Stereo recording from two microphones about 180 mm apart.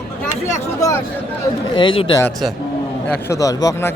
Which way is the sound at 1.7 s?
30° left (ahead or behind).